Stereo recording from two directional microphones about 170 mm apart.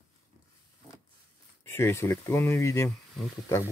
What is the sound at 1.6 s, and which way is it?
Speech, 15° left (ahead or behind).